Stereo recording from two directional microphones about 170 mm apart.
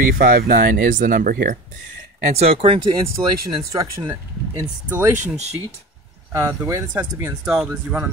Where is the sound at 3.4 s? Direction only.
20° right (ahead or behind).